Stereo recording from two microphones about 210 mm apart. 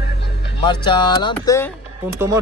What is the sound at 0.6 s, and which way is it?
Speech, 20° left (ahead or behind).